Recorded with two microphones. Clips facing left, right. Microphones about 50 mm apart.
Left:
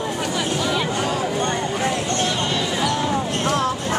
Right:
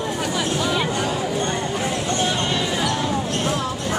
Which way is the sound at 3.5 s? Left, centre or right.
Left.